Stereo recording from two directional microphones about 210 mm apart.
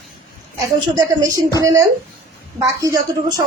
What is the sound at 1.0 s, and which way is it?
A woman's voice, 15° right (ahead or behind).